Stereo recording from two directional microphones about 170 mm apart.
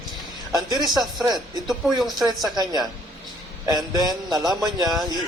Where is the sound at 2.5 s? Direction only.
25° right (ahead or behind).